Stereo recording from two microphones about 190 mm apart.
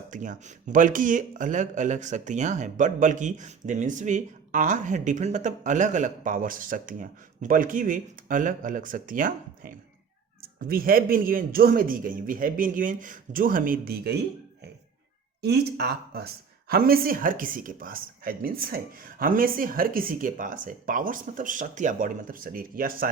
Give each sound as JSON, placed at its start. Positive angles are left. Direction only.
{"t": 0.1, "sound": "speech", "side_deg": -40}
{"t": 15.4, "sound": "speech", "side_deg": -60}